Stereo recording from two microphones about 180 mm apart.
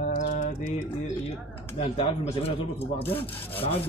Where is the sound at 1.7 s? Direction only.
35° left (ahead or behind).